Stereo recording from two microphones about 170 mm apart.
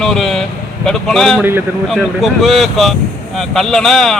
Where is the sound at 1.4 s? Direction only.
15° right (ahead or behind).